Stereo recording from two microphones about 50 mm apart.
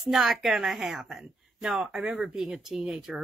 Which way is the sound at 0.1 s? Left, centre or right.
Centre.